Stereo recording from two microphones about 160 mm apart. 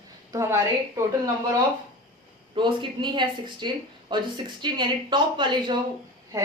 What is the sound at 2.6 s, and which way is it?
A woman's voice, 30° right (ahead or behind).